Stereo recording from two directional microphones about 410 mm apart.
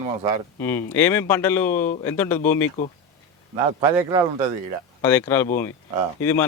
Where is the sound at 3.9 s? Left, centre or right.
Centre.